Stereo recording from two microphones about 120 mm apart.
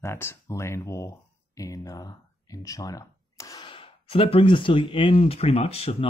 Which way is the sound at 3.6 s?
50° left (ahead or behind).